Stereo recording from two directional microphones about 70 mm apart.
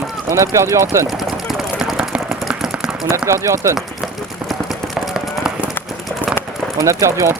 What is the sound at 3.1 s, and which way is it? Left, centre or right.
Speech, right.